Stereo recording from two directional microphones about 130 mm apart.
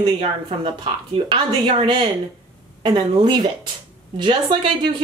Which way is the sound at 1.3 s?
40° right (ahead or behind).